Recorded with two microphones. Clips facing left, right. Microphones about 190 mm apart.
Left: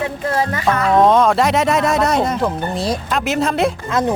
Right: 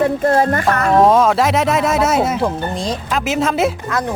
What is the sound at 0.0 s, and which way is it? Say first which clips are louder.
Speech: right 6 dB; 50° right (ahead or behind).